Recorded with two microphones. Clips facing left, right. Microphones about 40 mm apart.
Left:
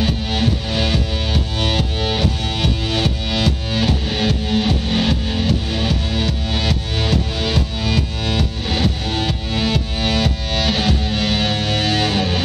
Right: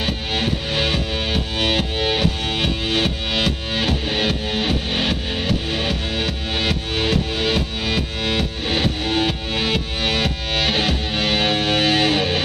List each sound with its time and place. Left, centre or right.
0.0 s music: centre